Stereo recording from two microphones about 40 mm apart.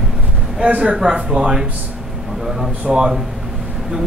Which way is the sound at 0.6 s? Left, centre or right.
Right.